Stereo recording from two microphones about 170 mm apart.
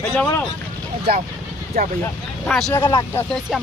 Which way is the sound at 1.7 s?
60° right (ahead or behind).